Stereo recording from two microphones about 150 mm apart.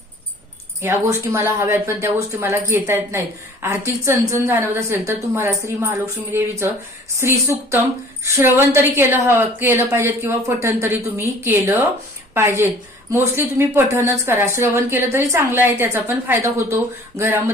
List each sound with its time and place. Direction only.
0.8 s a woman's voice: 15° right (ahead or behind)